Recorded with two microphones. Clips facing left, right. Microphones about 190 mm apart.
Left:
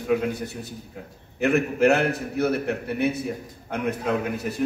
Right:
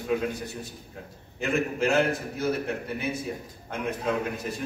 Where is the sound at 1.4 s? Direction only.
65° left (ahead or behind).